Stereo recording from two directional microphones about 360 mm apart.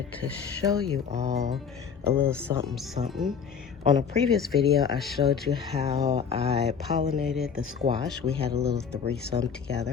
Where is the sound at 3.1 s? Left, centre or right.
Centre.